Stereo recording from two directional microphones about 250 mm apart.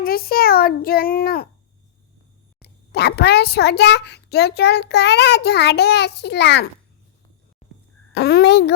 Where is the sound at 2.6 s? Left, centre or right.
Left.